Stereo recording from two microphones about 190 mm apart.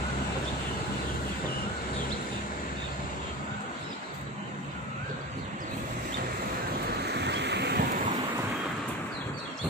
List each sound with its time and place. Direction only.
7.0 s vehicle: 60° right (ahead or behind)